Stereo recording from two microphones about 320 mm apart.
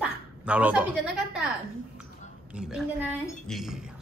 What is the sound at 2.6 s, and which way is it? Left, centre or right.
A woman's voice, centre.